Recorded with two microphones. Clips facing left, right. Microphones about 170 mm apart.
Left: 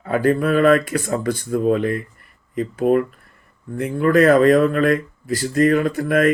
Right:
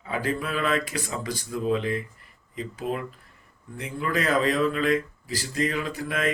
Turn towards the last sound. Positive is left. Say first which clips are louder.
# left 11 dB
turn(degrees=55)  # may be behind; listen again after turning